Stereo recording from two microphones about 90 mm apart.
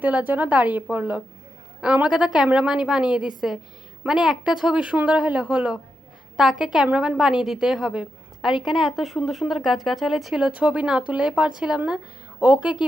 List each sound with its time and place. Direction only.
0.0 s a woman's voice: 20° right (ahead or behind)